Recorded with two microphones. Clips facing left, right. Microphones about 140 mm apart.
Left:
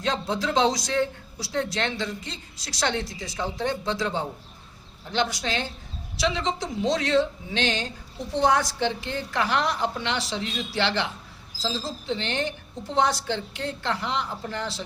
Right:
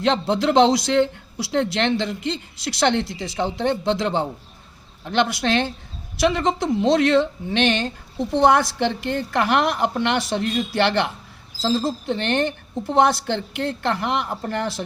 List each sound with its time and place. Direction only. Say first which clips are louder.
0.0 s a man's voice: right 7 dB; 65° right (ahead or behind)
6.1 s speech: right 6 dB; 55° right (ahead or behind)